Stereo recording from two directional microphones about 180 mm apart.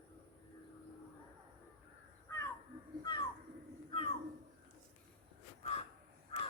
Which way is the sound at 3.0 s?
25° left (ahead or behind).